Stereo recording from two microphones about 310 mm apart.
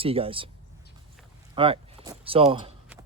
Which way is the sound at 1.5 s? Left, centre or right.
Centre.